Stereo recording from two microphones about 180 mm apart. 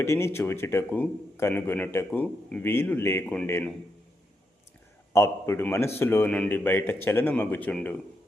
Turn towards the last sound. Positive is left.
turn(degrees=10)  # may be behind; listen again after turning